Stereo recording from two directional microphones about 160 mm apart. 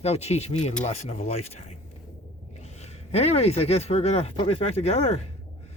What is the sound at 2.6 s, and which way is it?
Speech, 40° left (ahead or behind).